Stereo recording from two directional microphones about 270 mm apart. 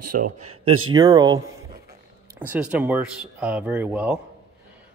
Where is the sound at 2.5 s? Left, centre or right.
Centre.